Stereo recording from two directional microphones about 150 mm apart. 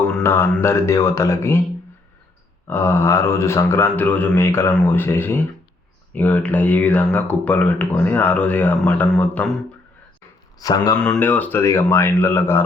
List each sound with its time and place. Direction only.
0.1 s speech: 15° left (ahead or behind)
2.6 s speech: 15° left (ahead or behind)
10.6 s speech: 25° left (ahead or behind)
10.9 s speech: 10° left (ahead or behind)